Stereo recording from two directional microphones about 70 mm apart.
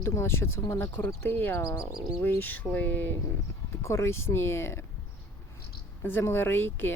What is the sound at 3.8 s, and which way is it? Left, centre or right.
Speech, left.